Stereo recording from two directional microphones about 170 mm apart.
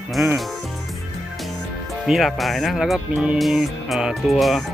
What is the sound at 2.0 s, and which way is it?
Speech, centre (ahead or behind).